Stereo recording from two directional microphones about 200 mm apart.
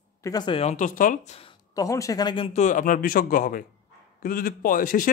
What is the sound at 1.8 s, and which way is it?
A man's voice, 15° left (ahead or behind).